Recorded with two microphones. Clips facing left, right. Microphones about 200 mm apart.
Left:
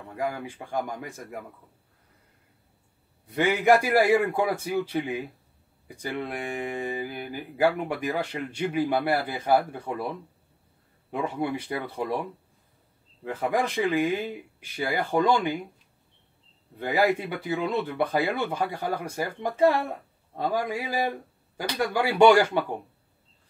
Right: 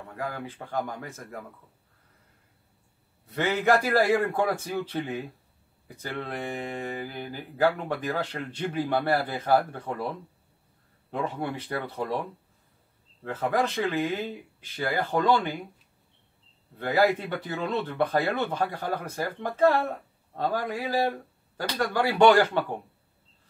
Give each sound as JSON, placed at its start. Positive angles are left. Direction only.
{"t": 0.1, "sound": "speech", "side_deg": 15}
{"t": 3.3, "sound": "speech", "side_deg": 15}
{"t": 11.1, "sound": "speech", "side_deg": 15}
{"t": 13.2, "sound": "speech", "side_deg": 15}
{"t": 16.7, "sound": "speech", "side_deg": 15}